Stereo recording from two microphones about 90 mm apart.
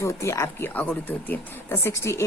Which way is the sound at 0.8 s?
20° left (ahead or behind).